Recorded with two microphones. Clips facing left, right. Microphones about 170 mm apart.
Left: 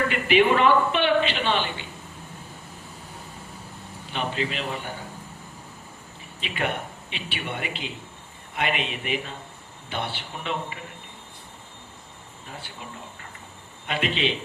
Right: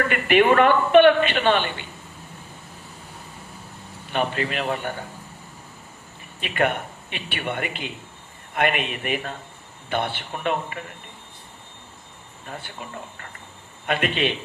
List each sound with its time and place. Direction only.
0.1 s speech: 55° right (ahead or behind)
4.1 s speech: 55° right (ahead or behind)
6.4 s a man's voice: 55° right (ahead or behind)
13.8 s speech: 55° right (ahead or behind)